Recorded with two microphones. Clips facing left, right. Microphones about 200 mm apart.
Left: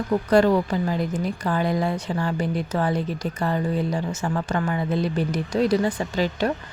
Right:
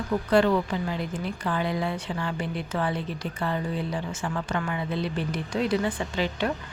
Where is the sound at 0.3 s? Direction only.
40° left (ahead or behind).